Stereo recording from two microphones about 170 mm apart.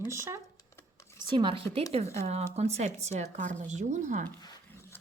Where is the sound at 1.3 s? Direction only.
30° right (ahead or behind); by 4.3 s 45° right (ahead or behind).